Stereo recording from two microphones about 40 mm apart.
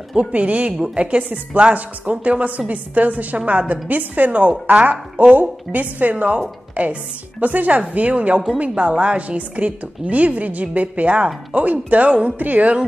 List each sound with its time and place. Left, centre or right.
0.1 s a woman's voice: right
0.7 s a woman's voice: right
1.6 s a woman's voice: right
12.4 s a woman's voice: right